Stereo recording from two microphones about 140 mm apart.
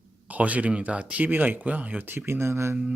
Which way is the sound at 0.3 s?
10° right (ahead or behind).